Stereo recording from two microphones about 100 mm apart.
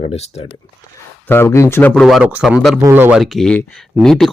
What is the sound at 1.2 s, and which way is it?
Speech, 25° left (ahead or behind).